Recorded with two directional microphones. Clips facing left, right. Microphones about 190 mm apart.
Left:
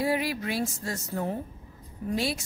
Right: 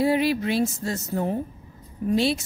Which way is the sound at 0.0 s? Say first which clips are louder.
Right 6 dB; 25° right (ahead or behind).